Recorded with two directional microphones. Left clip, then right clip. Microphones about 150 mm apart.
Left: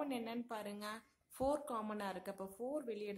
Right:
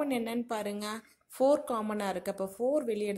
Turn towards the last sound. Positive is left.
turn(degrees=-25)  # may be behind; listen again after turning